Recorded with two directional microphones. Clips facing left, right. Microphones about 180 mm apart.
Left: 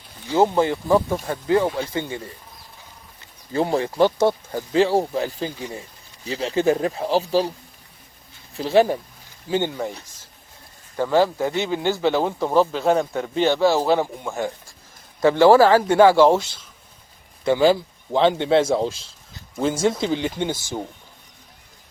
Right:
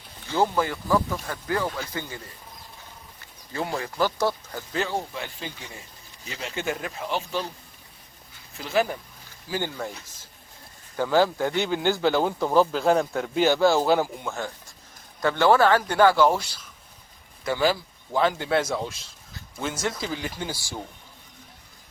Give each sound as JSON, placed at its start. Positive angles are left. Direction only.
{"t": 0.3, "sound": "speech", "side_deg": 25}
{"t": 3.5, "sound": "speech", "side_deg": 30}
{"t": 8.5, "sound": "speech", "side_deg": 30}
{"t": 9.5, "sound": "speech", "side_deg": 20}
{"t": 10.9, "sound": "speech", "side_deg": 0}
{"t": 14.3, "sound": "speech", "side_deg": 15}